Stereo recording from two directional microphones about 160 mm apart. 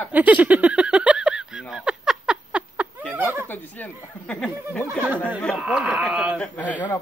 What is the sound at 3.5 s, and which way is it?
Speech, 10° left (ahead or behind).